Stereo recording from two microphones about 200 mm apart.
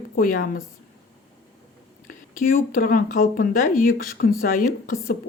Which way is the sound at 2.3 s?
45° left (ahead or behind).